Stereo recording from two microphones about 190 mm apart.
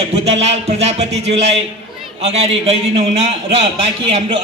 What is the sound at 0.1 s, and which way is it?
A man's voice, 35° right (ahead or behind).